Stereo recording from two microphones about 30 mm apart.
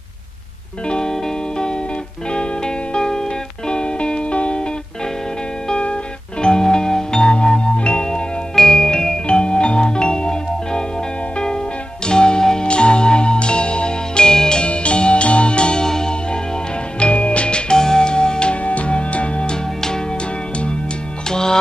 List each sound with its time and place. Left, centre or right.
0.8 s music: left
2.3 s music: left
6.4 s music: left
8.5 s music: centre
12.1 s music: left
12.6 s music: left
14.7 s music: left
15.8 s music: left
17.0 s music: left
17.7 s music: left
18.5 s music: left
19.5 s music: left
21.3 s music: left